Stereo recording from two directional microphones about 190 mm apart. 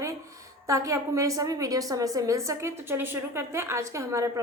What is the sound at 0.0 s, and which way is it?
A woman's voice, 15° right (ahead or behind).